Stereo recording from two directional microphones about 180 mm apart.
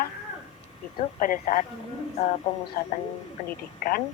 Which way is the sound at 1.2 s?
50° left (ahead or behind).